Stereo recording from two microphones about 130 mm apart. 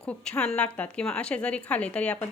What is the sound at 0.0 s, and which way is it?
A woman's voice, 10° left (ahead or behind).